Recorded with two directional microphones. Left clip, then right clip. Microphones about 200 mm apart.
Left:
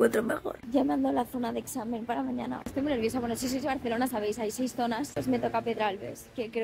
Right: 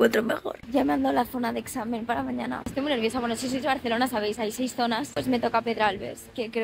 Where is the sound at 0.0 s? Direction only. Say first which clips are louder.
Right 3 dB; 10° left (ahead or behind).